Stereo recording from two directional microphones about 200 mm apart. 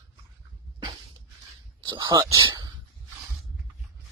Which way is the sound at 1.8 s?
25° right (ahead or behind).